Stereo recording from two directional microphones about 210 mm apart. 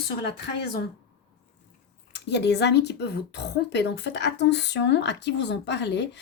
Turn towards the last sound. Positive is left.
turn(degrees=55)  # may be behind; listen again after turning